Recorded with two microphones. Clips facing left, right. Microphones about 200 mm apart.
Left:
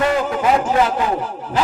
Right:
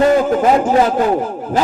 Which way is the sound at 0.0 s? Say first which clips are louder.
Right 6 dB; 40° right (ahead or behind).